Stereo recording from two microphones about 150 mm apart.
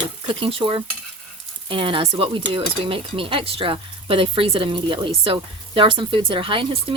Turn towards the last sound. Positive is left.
turn(degrees=-35)  # may be behind; listen again after turning